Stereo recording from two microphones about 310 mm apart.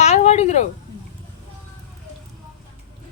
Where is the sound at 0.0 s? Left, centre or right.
Left.